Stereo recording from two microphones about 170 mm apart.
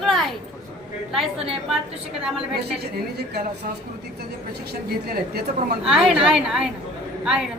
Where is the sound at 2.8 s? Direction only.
70° right (ahead or behind).